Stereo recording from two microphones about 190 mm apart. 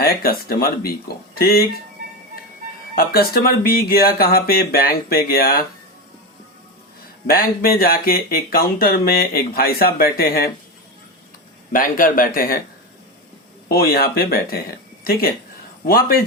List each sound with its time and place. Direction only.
0.0 s speech: 50° left (ahead or behind)
2.9 s speech: 50° left (ahead or behind)
7.3 s speech: 50° left (ahead or behind)
11.7 s speech: 45° left (ahead or behind)
13.7 s speech: 50° left (ahead or behind)